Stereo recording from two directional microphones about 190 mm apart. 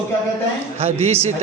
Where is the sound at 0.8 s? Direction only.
35° right (ahead or behind).